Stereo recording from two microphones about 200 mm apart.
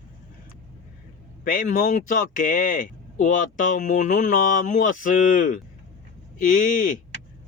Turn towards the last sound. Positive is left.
turn(degrees=40)  # may be behind; listen again after turning